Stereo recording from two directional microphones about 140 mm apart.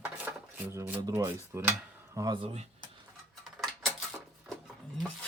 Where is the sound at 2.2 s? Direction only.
40° right (ahead or behind).